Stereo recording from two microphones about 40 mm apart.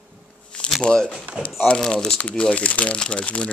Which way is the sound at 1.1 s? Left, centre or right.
Right.